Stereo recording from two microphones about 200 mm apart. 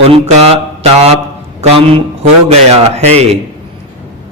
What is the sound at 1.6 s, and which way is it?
A man's voice, 30° right (ahead or behind).